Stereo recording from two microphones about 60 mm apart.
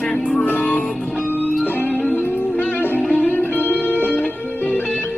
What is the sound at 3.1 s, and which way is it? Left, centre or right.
Music, left.